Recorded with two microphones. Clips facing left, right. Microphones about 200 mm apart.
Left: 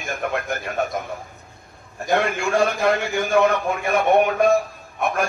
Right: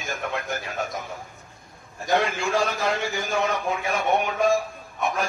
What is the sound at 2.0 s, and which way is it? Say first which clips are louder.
A man's voice: left 2 dB; 55° left (ahead or behind).